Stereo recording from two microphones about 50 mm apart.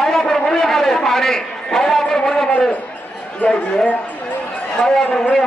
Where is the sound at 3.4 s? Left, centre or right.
Left.